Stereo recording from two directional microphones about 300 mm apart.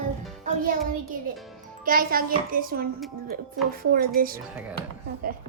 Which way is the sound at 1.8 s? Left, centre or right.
Right.